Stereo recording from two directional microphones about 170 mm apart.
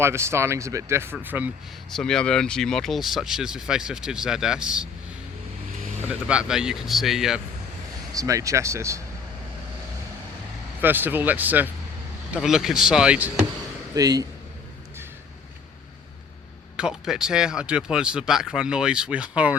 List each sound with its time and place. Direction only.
0.0 s speech: 15° right (ahead or behind)
1.9 s speech: 5° left (ahead or behind)
5.7 s vehicle: 45° right (ahead or behind)
6.1 s speech: 5° right (ahead or behind)
8.1 s speech: 20° right (ahead or behind)
10.8 s speech: 10° right (ahead or behind)
13.9 s speech: 20° right (ahead or behind)
16.7 s speech: 5° right (ahead or behind)